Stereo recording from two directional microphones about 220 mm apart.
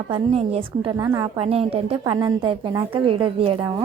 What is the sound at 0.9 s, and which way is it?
A woman's voice, 15° right (ahead or behind).